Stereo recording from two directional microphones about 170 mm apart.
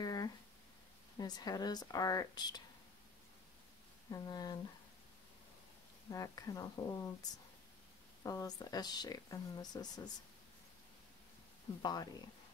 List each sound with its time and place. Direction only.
0.0 s a sound: 20° left (ahead or behind)
1.1 s speech: 20° left (ahead or behind)
4.1 s speech: 20° left (ahead or behind)
6.0 s speech: 20° left (ahead or behind)
11.8 s speech: 25° left (ahead or behind)